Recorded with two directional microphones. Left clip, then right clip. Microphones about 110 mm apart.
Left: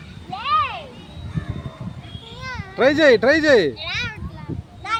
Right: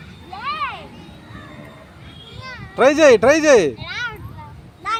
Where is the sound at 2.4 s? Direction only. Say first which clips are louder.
Left 3 dB; 30° left (ahead or behind).